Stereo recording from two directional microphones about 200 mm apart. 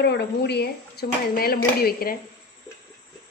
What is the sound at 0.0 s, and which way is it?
Speech, 55° left (ahead or behind).